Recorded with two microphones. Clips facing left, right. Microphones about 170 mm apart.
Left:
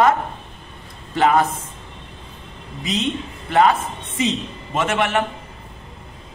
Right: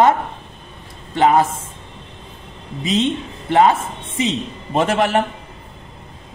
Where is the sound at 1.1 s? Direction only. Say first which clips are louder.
Right 2 dB; 25° right (ahead or behind).